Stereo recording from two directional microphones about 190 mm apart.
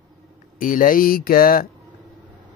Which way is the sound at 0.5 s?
45° left (ahead or behind).